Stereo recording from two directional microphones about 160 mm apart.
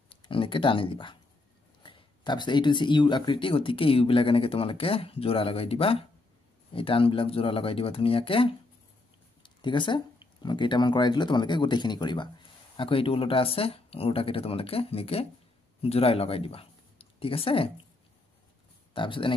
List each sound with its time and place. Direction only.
0.1 s speech: 35° left (ahead or behind)
18.9 s speech: 30° left (ahead or behind)